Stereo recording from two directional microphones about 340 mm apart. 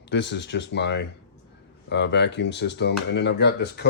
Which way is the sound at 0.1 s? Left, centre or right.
Left.